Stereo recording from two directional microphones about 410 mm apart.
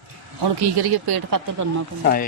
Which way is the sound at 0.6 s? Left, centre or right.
Right.